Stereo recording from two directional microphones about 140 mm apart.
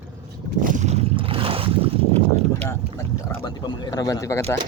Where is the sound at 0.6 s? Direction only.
60° right (ahead or behind).